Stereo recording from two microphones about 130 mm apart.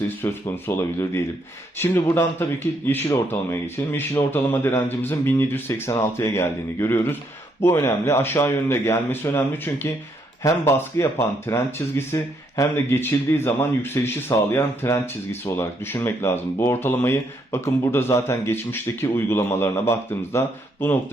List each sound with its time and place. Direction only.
0.0 s a man's voice: 15° left (ahead or behind)